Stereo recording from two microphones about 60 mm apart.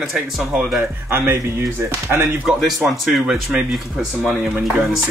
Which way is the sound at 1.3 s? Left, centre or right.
Right.